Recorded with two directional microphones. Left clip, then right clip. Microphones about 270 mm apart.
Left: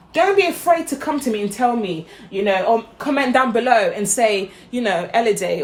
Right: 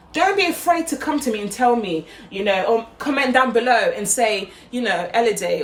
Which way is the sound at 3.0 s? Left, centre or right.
Centre.